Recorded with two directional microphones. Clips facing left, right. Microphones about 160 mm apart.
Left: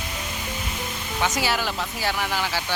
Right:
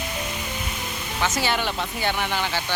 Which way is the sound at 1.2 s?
10° left (ahead or behind).